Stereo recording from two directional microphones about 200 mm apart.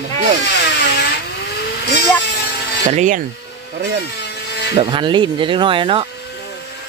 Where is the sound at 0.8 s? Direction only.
55° left (ahead or behind).